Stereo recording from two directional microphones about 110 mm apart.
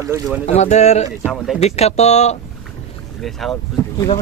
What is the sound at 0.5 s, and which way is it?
Speech, 90° left.